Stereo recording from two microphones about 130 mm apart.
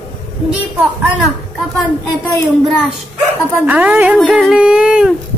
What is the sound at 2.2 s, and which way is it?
Speech, 25° left (ahead or behind).